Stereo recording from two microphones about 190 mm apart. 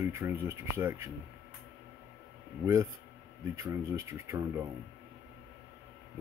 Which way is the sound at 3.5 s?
15° right (ahead or behind).